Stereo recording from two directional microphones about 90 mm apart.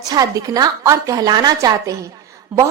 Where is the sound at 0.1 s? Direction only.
45° right (ahead or behind).